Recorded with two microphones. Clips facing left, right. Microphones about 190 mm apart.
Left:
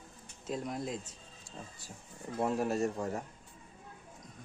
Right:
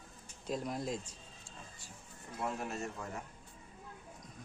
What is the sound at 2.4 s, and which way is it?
Speech, 35° left (ahead or behind).